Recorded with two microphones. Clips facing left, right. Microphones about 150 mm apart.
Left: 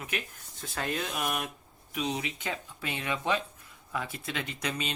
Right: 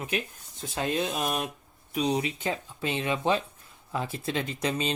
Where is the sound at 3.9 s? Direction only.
30° right (ahead or behind).